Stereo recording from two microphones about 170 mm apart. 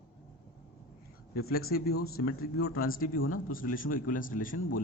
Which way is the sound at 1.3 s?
65° left (ahead or behind).